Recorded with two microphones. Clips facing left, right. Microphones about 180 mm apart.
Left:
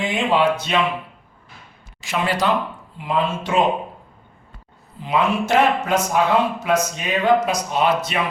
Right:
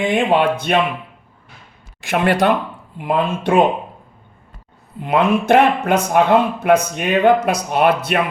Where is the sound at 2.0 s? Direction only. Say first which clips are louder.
Right 6 dB; 55° right (ahead or behind).